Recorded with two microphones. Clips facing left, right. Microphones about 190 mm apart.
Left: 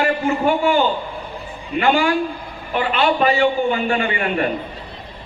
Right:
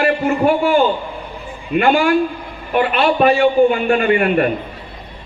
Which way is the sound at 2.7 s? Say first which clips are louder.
Right 3 dB; 55° right (ahead or behind).